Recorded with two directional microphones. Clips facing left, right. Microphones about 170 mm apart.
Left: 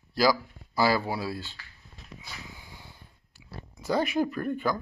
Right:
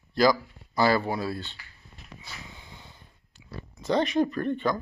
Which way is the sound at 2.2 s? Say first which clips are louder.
Even; 5° left (ahead or behind).